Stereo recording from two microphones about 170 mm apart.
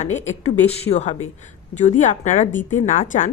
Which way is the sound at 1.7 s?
45° left (ahead or behind).